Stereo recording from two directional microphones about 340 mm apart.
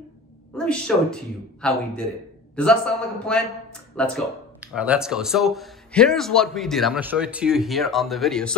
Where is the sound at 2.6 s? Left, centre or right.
Centre.